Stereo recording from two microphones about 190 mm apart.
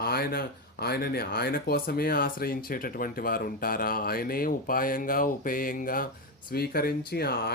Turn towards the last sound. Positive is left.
turn(degrees=55)  # may be behind; listen again after turning